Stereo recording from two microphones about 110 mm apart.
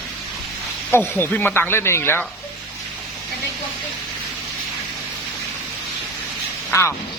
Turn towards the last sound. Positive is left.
turn(degrees=25)  # may be behind; listen again after turning